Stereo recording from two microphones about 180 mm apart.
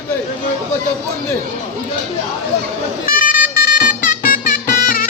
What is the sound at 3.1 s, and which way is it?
Music, 50° left (ahead or behind).